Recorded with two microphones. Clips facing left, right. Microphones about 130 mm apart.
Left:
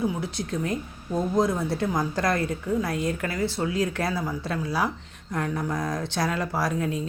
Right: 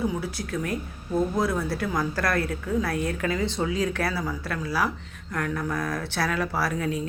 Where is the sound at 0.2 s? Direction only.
20° left (ahead or behind).